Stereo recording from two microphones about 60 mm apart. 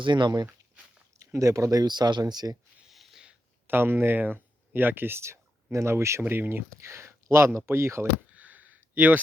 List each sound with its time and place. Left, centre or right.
0.1 s speech: right
2.8 s a sound: centre
3.7 s speech: right
6.2 s speech: right
6.7 s speech: right
8.3 s a sound: right